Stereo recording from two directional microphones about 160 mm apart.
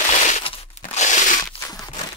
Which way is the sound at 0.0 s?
50° left (ahead or behind).